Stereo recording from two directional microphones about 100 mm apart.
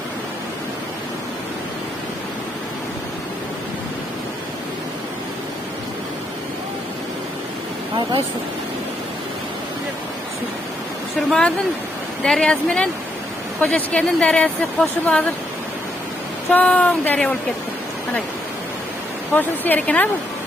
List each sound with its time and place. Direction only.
11.3 s speech: 10° left (ahead or behind)
16.5 s speech: 15° left (ahead or behind)
19.3 s speech: 20° left (ahead or behind)